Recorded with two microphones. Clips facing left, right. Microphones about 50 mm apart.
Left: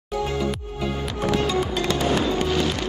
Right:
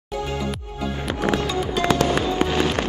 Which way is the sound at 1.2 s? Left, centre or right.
Right.